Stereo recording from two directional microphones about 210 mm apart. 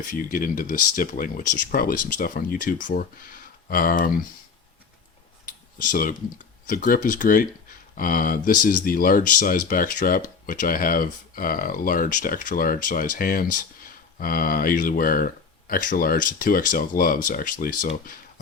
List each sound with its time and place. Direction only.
0.1 s speech: 40° left (ahead or behind)
5.5 s clicking: 40° left (ahead or behind)
6.7 s speech: 45° left (ahead or behind)